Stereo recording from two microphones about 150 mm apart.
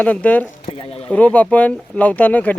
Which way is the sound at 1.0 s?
10° left (ahead or behind).